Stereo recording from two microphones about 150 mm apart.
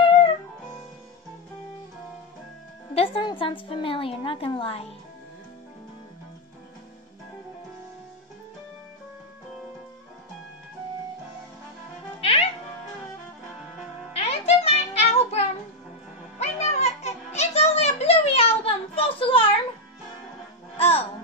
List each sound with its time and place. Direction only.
2.9 s a woman's voice: 35° left (ahead or behind)
12.2 s music: 40° left (ahead or behind)
14.1 s music: 45° left (ahead or behind)
18.6 s a sound: 40° left (ahead or behind)
20.7 s music: 40° left (ahead or behind)